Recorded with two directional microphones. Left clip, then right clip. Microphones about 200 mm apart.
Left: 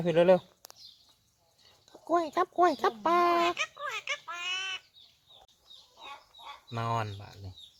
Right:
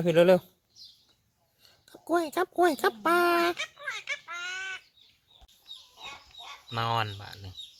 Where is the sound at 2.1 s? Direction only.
35° right (ahead or behind).